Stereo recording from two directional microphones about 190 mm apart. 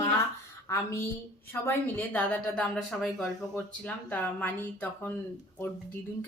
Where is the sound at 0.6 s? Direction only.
15° left (ahead or behind).